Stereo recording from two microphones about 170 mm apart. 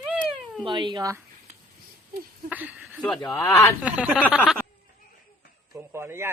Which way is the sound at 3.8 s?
5° right (ahead or behind).